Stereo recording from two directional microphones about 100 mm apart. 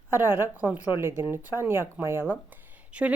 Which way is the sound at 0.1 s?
20° right (ahead or behind).